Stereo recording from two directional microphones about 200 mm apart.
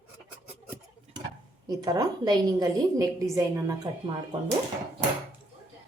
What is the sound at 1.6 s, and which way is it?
A woman's voice, 20° right (ahead or behind).